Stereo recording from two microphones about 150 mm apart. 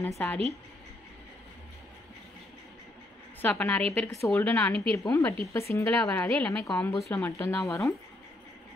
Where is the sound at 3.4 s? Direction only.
10° left (ahead or behind).